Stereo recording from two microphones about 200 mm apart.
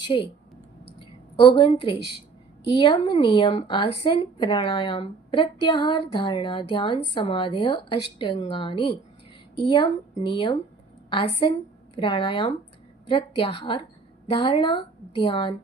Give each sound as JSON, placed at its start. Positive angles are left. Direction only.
{"t": 0.1, "sound": "a woman's voice", "side_deg": 25}
{"t": 0.9, "sound": "a sound", "side_deg": 25}
{"t": 2.6, "sound": "a woman's voice", "side_deg": 25}
{"t": 11.9, "sound": "a woman's voice", "side_deg": 25}